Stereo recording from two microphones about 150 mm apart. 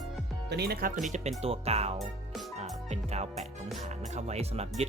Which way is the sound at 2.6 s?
45° right (ahead or behind).